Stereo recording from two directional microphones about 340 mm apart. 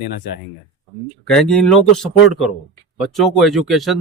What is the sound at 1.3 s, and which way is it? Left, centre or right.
A man's voice, centre.